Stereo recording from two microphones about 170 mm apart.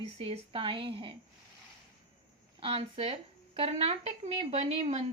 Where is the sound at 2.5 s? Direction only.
35° right (ahead or behind).